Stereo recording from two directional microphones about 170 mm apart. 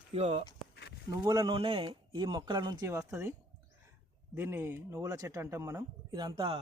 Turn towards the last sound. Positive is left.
turn(degrees=-25)  # may be behind; listen again after turning